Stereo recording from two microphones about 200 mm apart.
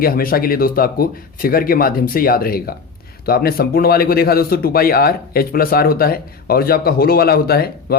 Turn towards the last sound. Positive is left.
turn(degrees=50)  # may be behind; listen again after turning